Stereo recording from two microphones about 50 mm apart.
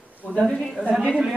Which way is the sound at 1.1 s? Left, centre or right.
Centre.